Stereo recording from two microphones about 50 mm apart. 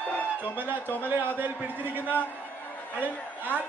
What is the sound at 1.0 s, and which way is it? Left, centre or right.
Speech, right.